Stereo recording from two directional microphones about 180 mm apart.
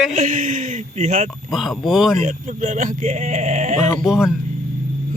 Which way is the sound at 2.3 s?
45° right (ahead or behind).